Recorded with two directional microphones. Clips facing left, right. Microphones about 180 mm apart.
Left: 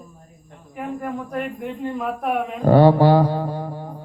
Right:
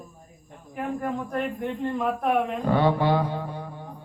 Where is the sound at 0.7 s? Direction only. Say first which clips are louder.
Left 1 dB; 5° left (ahead or behind).